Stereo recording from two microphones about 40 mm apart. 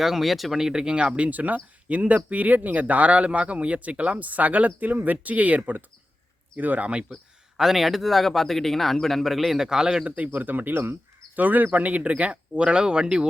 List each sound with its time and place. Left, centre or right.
0.0 s speech: centre
0.6 s speech: centre; by 7.0 s right
7.5 s speech: centre
9.6 s a man's voice: centre
10.3 s speech: right
11.3 s speech: right